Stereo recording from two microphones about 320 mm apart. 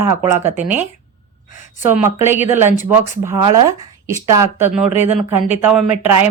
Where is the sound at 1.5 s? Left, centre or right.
Left.